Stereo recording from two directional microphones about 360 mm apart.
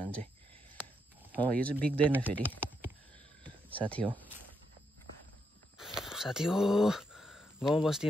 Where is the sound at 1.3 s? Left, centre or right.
Centre.